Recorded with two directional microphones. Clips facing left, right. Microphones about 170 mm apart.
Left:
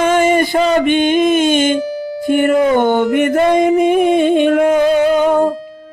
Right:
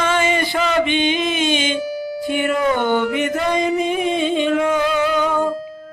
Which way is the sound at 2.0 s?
50° left (ahead or behind).